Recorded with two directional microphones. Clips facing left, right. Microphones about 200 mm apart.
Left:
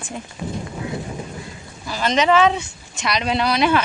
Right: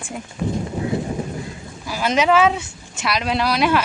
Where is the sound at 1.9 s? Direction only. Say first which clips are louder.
Even; 10° right (ahead or behind).